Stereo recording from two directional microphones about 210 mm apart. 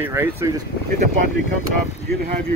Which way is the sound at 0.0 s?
10° right (ahead or behind).